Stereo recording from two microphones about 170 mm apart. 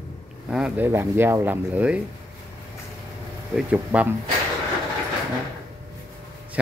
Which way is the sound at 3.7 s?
10° right (ahead or behind).